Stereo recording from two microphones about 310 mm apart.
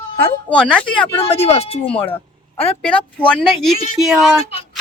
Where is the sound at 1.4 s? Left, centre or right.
Centre.